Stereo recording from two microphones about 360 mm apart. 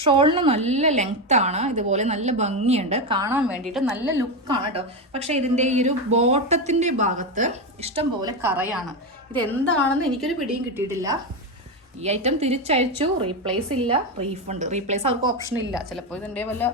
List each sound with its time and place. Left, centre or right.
0.0 s a woman's voice: centre
15.4 s a woman's voice: centre